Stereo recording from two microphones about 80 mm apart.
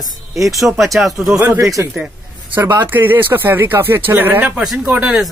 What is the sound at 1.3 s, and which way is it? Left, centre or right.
Speech, right.